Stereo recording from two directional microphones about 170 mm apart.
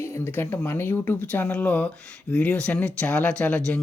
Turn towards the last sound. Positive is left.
turn(degrees=5)  # may be behind; listen again after turning